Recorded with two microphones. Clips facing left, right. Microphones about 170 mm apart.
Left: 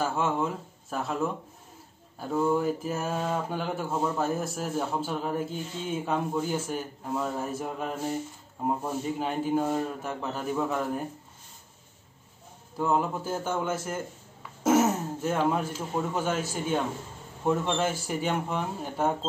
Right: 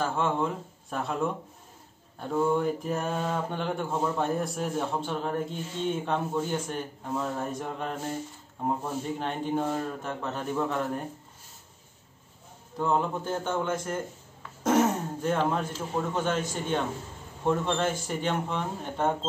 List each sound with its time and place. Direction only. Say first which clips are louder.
0.0 s mantra: even; 5° left (ahead or behind)
12.7 s a man's voice: even; 5° left (ahead or behind)